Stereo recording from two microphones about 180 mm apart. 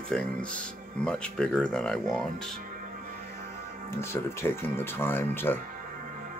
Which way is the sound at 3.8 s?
15° left (ahead or behind).